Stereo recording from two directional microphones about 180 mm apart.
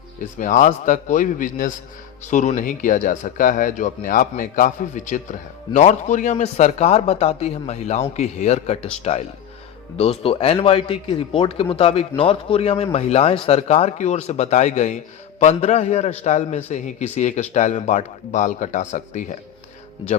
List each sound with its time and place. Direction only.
0.3 s a man's voice: 45° left (ahead or behind)